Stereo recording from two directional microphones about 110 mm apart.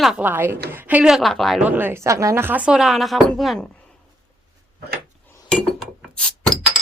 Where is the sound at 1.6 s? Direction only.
20° right (ahead or behind); by 3.6 s 5° left (ahead or behind).